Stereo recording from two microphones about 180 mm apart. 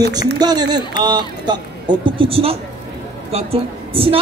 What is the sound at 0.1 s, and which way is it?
A man's voice, 20° right (ahead or behind).